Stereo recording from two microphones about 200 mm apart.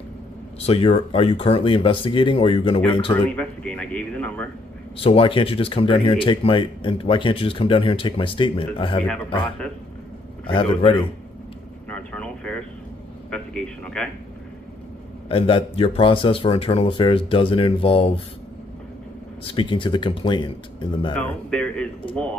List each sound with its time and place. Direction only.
0.6 s speech: 30° left (ahead or behind)
3.3 s speech: 5° left (ahead or behind)
4.9 s speech: 30° left (ahead or behind)
10.4 s speech: 25° left (ahead or behind)
11.9 s vehicle: 5° left (ahead or behind)
13.3 s speech: 5° left (ahead or behind)
15.2 s speech: 25° left (ahead or behind)
19.4 s speech: 25° left (ahead or behind)
21.2 s speech: 5° left (ahead or behind)